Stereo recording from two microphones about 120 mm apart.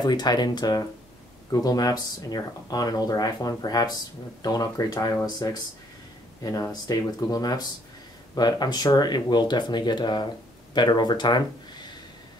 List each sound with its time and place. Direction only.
0.0 s speech: 35° left (ahead or behind)